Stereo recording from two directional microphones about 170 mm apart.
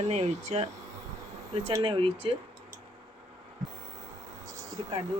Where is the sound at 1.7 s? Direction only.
30° right (ahead or behind).